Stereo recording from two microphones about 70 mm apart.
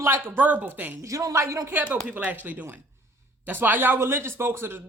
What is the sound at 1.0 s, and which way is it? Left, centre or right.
Speech, right.